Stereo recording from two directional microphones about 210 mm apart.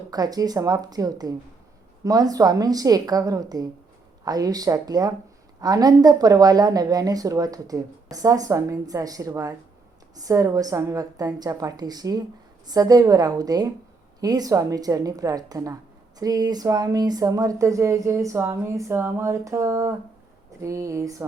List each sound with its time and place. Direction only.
0.1 s a woman's voice: 20° right (ahead or behind)